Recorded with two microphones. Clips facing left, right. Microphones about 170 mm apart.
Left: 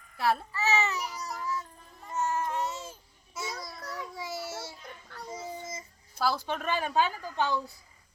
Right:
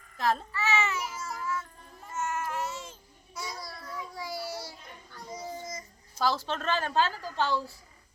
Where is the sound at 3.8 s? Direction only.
80° left.